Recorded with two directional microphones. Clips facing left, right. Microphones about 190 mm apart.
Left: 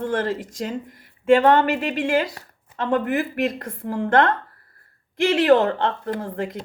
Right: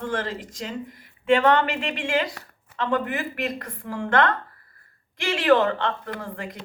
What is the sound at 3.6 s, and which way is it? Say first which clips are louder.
Speech: left 5 dB; 35° left (ahead or behind).